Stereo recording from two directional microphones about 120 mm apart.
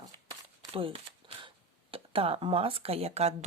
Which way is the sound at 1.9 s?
50° right (ahead or behind).